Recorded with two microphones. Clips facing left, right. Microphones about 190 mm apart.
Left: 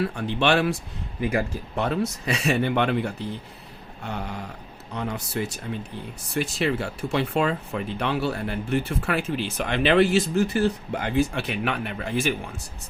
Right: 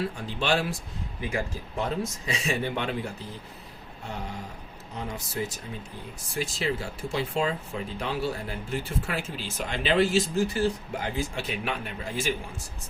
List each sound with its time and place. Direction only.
0.2 s speech: 65° left (ahead or behind)
4.9 s speech: 70° left (ahead or behind)